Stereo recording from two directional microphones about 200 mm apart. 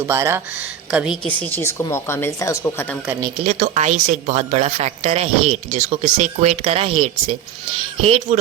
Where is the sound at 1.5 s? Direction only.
10° left (ahead or behind).